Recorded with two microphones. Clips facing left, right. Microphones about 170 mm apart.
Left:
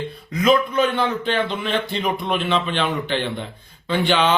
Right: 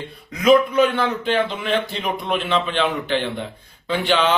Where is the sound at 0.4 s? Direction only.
5° right (ahead or behind).